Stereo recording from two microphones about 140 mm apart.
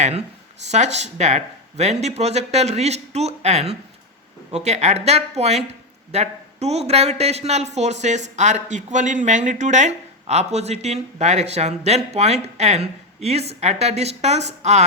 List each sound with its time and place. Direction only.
0.7 s speech: 55° right (ahead or behind)